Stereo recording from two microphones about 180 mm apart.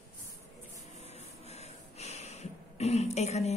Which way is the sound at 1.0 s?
35° left (ahead or behind).